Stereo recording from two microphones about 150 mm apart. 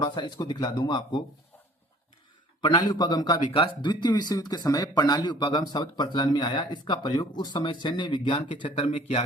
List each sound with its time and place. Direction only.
0.0 s speech: 30° left (ahead or behind)
2.6 s speech: 30° left (ahead or behind); by 9.2 s 45° left (ahead or behind)